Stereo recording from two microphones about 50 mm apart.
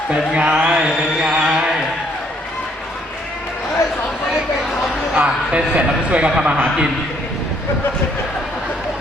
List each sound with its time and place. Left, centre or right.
0.3 s chant: right
5.1 s speech: right